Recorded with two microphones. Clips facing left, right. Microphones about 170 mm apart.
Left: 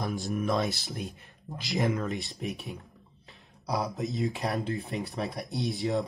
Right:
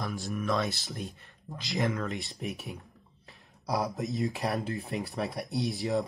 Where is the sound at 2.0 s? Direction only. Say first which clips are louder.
Left 2 dB; centre (ahead or behind).